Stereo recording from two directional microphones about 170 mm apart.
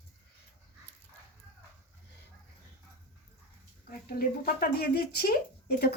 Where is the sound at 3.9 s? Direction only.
60° left (ahead or behind).